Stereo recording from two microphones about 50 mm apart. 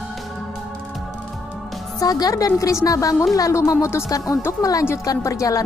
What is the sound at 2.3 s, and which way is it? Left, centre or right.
Speech, left.